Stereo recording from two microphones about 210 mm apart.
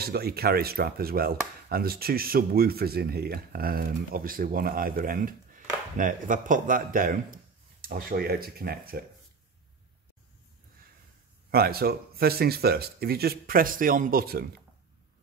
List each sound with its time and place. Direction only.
0.0 s speech: 50° right (ahead or behind)
11.5 s speech: 45° right (ahead or behind)